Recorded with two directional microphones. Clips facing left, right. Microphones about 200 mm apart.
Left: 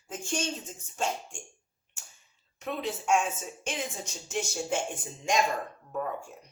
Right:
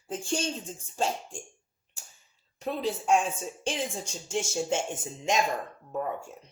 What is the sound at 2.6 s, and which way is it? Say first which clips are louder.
Speech: right 3 dB; 35° right (ahead or behind).